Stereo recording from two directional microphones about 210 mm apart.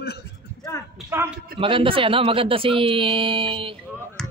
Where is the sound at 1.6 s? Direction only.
25° right (ahead or behind).